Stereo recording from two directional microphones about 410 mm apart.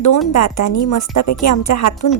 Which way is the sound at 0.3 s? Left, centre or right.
Left.